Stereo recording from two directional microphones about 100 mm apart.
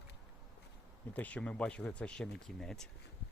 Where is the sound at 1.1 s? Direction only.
15° left (ahead or behind).